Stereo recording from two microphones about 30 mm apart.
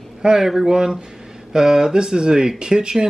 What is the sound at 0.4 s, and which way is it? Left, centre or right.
Speech, centre.